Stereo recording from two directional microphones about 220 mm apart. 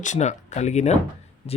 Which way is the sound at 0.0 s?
35° left (ahead or behind).